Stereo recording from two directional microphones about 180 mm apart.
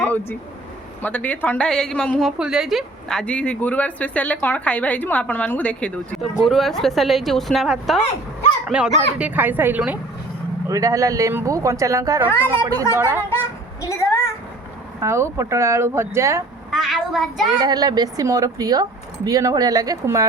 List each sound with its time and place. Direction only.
0.0 s a sound: 10° left (ahead or behind)
1.0 s a woman's voice: 10° left (ahead or behind); by 13.2 s 10° right (ahead or behind)
13.8 s a woman's voice: 20° left (ahead or behind)
15.0 s speech: 15° right (ahead or behind)
16.7 s a woman's voice: centre (ahead or behind)
17.6 s speech: 20° right (ahead or behind)